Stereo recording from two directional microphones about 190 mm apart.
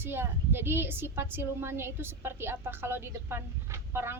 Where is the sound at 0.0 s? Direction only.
10° right (ahead or behind).